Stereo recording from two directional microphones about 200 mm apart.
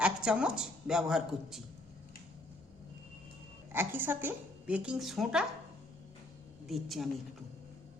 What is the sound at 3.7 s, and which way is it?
A woman's voice, 10° right (ahead or behind).